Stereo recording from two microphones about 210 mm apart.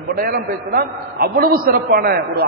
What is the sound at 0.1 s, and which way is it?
A man's voice, 45° right (ahead or behind).